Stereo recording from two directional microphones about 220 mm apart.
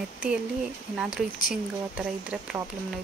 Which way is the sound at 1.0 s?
35° left (ahead or behind).